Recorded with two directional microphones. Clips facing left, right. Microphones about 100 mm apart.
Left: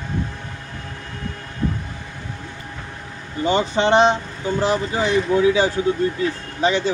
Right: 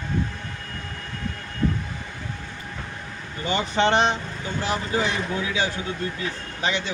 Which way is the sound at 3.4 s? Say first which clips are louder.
Left 4 dB; 30° left (ahead or behind).